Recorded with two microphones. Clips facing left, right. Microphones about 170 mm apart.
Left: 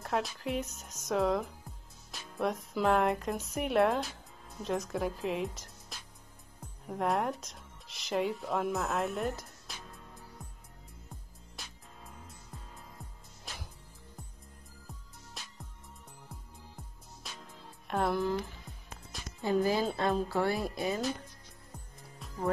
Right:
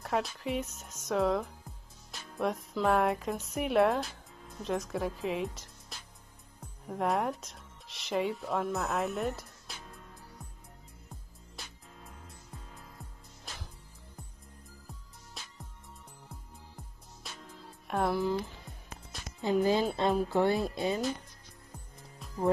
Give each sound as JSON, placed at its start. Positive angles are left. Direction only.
{"t": 0.0, "sound": "speech", "side_deg": 0}
{"t": 9.7, "sound": "music", "side_deg": 0}
{"t": 17.8, "sound": "music", "side_deg": 0}
{"t": 18.1, "sound": "a woman's voice", "side_deg": -15}
{"t": 22.2, "sound": "music", "side_deg": 0}